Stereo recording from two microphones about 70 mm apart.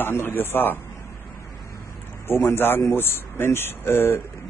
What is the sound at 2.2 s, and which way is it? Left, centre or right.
Speech, left.